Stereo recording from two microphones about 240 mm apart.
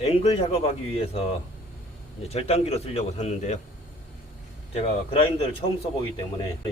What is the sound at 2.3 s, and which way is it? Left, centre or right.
A man's voice, left.